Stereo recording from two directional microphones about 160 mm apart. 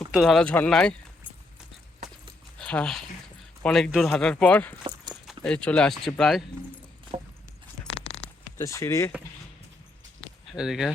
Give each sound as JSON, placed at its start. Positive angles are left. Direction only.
{"t": 0.1, "sound": "speech", "side_deg": 0}
{"t": 2.6, "sound": "speech", "side_deg": 5}
{"t": 4.8, "sound": "keys jangling", "side_deg": -30}
{"t": 5.2, "sound": "speech", "side_deg": 0}
{"t": 8.5, "sound": "speech", "side_deg": 20}
{"t": 10.5, "sound": "speech", "side_deg": -5}